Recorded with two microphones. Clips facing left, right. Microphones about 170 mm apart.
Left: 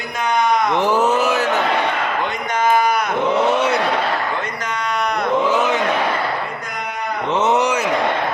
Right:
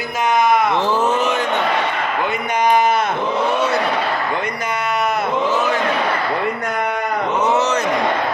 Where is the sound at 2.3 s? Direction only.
15° right (ahead or behind).